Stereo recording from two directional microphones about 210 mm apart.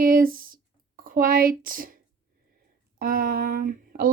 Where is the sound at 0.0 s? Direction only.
40° right (ahead or behind).